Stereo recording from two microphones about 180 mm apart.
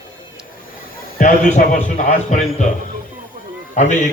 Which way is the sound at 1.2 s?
45° left (ahead or behind).